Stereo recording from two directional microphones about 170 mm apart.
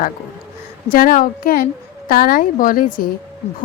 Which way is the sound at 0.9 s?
55° left (ahead or behind).